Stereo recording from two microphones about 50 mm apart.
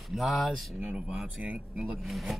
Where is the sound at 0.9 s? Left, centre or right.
Centre.